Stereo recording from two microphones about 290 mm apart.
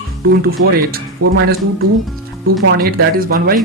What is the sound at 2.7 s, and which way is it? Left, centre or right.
Speech, right.